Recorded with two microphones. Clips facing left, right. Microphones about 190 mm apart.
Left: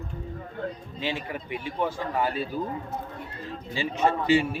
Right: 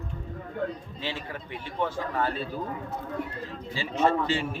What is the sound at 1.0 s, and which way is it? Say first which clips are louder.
A man's voice: left 5 dB; 15° left (ahead or behind).